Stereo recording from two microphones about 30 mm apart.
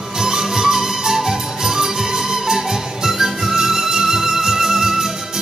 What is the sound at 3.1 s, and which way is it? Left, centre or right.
Music, centre.